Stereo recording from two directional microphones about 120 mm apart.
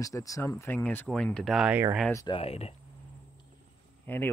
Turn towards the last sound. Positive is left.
turn(degrees=15)  # may be behind; listen again after turning